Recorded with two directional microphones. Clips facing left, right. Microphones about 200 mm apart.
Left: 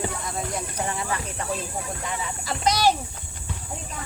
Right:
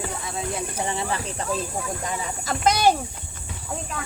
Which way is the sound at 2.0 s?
50° right (ahead or behind).